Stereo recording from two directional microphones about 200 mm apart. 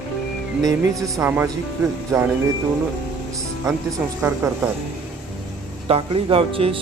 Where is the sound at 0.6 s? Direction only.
15° right (ahead or behind).